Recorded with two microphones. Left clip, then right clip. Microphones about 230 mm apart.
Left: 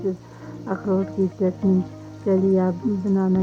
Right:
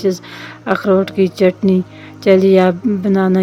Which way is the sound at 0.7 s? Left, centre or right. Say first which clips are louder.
Right 11 dB; right.